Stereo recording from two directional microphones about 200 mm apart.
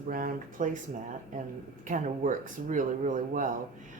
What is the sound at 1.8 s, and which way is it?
Speech, 40° right (ahead or behind).